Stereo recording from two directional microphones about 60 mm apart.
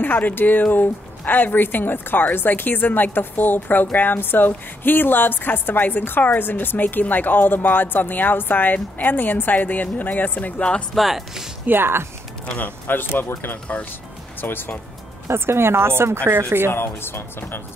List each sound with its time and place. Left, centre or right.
0.0 s a woman's voice: left
11.0 s speech: centre
11.6 s speech: right
12.4 s a woman's voice: left
14.4 s a woman's voice: left
15.2 s speech: right
16.7 s a woman's voice: left